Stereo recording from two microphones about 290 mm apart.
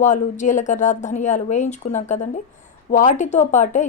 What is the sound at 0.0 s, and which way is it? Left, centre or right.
Speech, left.